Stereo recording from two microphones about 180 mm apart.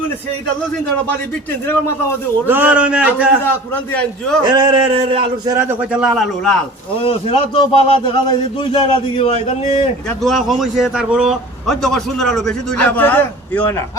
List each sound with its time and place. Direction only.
2.5 s a man's voice: 10° right (ahead or behind)
4.4 s a man's voice: 25° right (ahead or behind)
5.5 s a man's voice: 10° right (ahead or behind)
7.0 s a man's voice: 30° left (ahead or behind)
10.2 s a man's voice: centre (ahead or behind)